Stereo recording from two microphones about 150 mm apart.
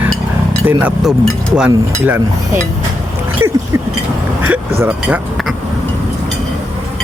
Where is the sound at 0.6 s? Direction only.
5° right (ahead or behind).